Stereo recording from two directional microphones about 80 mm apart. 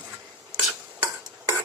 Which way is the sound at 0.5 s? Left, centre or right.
Right.